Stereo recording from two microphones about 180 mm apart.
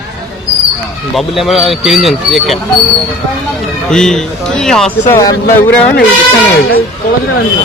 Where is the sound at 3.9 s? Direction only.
5° left (ahead or behind).